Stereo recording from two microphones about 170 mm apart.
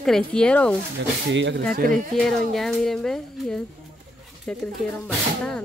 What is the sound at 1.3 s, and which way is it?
Speech, 90° right.